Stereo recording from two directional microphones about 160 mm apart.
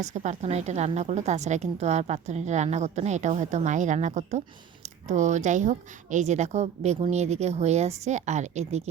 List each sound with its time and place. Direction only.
0.0 s a woman's voice: 45° right (ahead or behind)